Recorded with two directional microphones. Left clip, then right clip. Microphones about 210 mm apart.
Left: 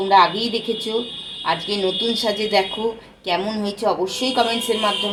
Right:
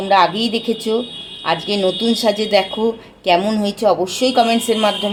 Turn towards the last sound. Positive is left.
turn(degrees=-50)  # may be behind; listen again after turning